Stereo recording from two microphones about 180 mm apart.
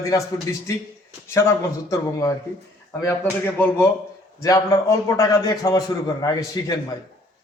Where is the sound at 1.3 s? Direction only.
15° left (ahead or behind).